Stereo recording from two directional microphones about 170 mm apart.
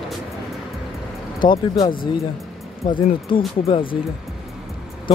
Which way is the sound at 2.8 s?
25° left (ahead or behind).